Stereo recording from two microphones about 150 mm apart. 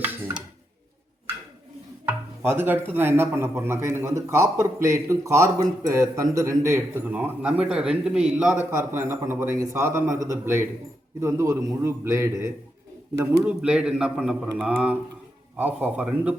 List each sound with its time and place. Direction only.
0.0 s music: 10° right (ahead or behind)
2.0 s a man's voice: 15° right (ahead or behind)
13.5 s speech: 5° right (ahead or behind)